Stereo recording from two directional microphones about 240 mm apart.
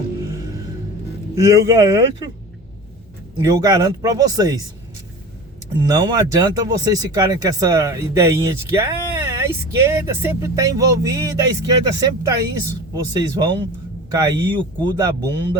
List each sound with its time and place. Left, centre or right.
1.4 s speech: centre
3.4 s speech: centre
5.9 s speech: centre